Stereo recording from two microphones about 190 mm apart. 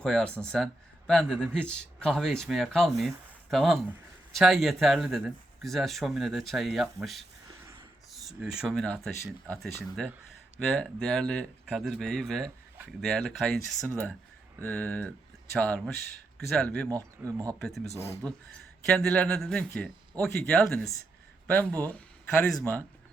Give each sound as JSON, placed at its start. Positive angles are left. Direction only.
{"t": 0.0, "sound": "speech", "side_deg": 5}
{"t": 16.9, "sound": "speech", "side_deg": -15}
{"t": 17.6, "sound": "speech", "side_deg": 0}
{"t": 18.9, "sound": "speech", "side_deg": 5}